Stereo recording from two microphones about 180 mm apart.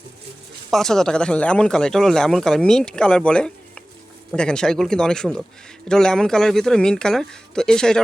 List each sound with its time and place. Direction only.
0.7 s speech: centre (ahead or behind)